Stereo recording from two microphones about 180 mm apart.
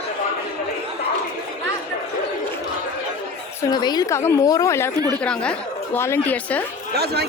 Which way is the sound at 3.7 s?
25° left (ahead or behind).